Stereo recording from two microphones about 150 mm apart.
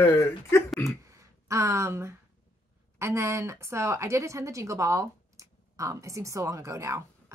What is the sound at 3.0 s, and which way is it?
Speech, 20° right (ahead or behind).